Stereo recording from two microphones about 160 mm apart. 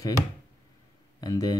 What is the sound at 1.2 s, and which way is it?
Speech, 20° left (ahead or behind).